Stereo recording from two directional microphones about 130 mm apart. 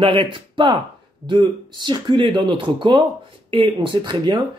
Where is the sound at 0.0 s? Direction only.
45° right (ahead or behind).